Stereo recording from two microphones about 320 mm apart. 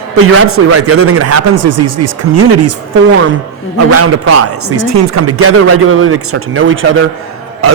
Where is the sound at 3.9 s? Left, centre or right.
Right.